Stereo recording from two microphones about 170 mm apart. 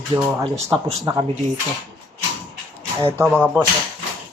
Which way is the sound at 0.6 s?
15° right (ahead or behind).